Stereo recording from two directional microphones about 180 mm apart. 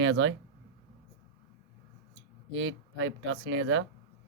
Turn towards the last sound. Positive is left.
turn(degrees=-90)